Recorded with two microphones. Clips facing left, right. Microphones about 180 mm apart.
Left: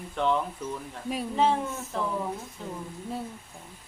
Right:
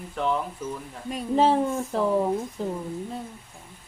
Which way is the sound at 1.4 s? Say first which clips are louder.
Right 5 dB; 35° right (ahead or behind).